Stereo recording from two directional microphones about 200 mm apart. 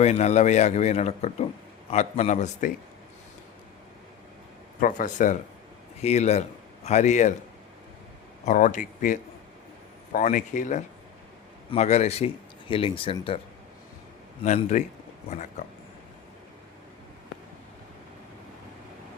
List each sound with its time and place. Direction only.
0.0 s a man's voice: 35° left (ahead or behind)
4.8 s a man's voice: 40° left (ahead or behind)
8.4 s a man's voice: 40° left (ahead or behind)
14.4 s a man's voice: 40° left (ahead or behind)